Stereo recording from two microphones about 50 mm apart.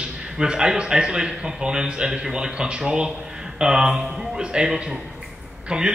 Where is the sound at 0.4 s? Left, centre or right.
Centre.